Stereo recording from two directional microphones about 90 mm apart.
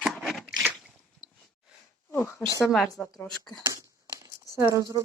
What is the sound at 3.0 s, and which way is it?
Speech, 10° left (ahead or behind).